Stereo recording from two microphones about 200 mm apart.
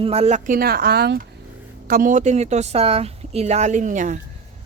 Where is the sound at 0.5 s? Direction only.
50° right (ahead or behind).